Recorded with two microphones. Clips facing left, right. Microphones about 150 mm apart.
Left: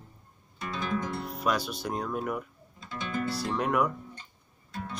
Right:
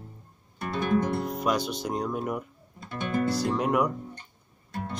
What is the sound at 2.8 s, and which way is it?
Music, 55° right (ahead or behind).